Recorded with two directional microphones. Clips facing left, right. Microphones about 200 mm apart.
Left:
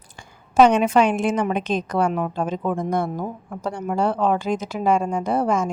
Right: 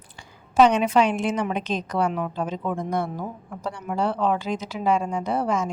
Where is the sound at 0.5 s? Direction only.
50° left (ahead or behind).